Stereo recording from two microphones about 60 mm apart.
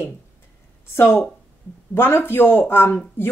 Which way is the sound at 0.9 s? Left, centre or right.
Left.